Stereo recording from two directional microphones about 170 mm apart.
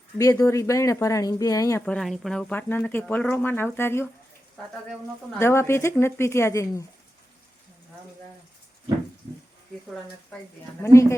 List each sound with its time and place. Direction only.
0.2 s speech: 20° left (ahead or behind)
1.8 s speech: 5° left (ahead or behind)
5.3 s speech: 15° left (ahead or behind)
11.0 s speech: 15° left (ahead or behind)